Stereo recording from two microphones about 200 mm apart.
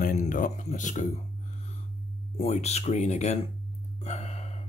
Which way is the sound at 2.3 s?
30° left (ahead or behind).